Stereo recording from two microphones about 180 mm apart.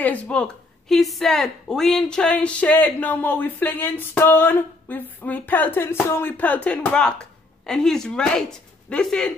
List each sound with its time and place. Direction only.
0.0 s speech: 5° left (ahead or behind)